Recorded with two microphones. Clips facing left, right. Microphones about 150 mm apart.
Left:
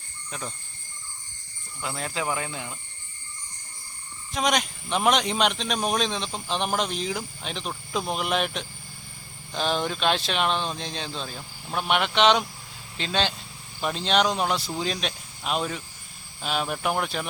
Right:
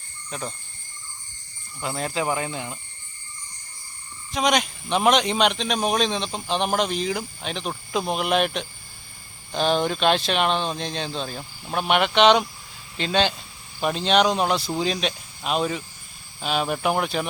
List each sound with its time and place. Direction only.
0.3 s speech: 25° right (ahead or behind)
2.0 s speech: 5° right (ahead or behind)
4.3 s speech: centre (ahead or behind)